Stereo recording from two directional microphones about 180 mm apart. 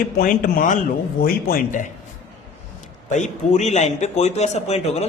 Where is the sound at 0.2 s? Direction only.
50° left (ahead or behind).